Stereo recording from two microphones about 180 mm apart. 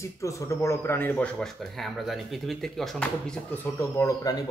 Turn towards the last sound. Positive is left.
turn(degrees=20)  # may be behind; listen again after turning